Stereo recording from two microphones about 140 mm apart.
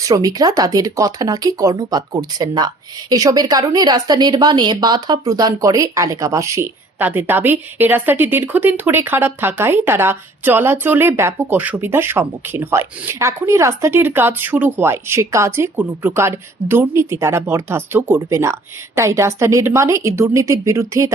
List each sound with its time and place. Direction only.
0.0 s speech: 25° right (ahead or behind)